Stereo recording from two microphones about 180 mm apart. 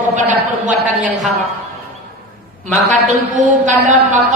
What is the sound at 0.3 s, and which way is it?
Speech, 45° right (ahead or behind).